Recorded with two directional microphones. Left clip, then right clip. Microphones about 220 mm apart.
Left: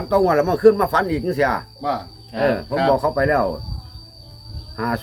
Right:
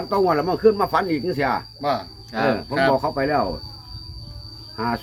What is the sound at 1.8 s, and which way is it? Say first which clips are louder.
Insect: right 1 dB; 45° right (ahead or behind).